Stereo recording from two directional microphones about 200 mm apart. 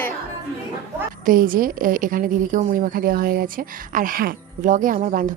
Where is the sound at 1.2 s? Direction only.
45° right (ahead or behind).